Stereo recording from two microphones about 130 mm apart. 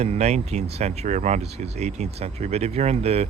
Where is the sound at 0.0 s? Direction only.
55° right (ahead or behind).